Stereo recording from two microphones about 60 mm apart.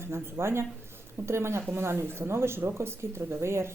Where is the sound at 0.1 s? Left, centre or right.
Right.